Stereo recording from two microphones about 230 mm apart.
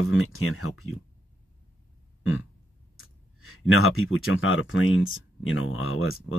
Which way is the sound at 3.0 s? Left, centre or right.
Left.